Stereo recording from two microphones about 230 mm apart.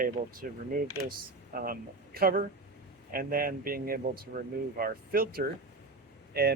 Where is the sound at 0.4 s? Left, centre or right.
Right.